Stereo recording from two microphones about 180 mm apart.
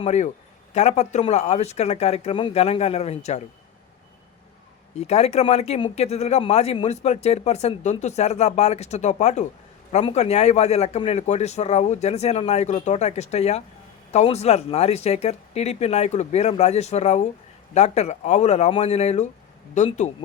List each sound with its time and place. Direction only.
0.0 s speech: 40° left (ahead or behind)
4.9 s speech: 35° left (ahead or behind)